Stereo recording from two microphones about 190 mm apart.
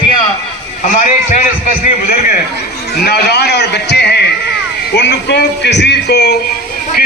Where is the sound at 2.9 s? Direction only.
55° left (ahead or behind).